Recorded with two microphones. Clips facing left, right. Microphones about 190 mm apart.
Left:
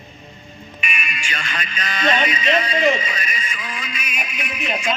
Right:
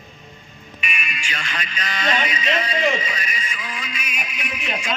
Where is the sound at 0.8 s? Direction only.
50° left (ahead or behind).